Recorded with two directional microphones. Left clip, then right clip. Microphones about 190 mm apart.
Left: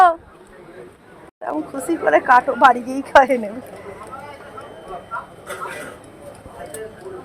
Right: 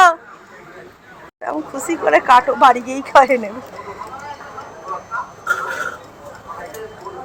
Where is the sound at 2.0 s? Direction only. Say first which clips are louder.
Right 2 dB; centre (ahead or behind).